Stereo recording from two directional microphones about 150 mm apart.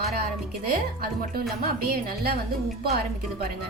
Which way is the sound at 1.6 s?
85° right.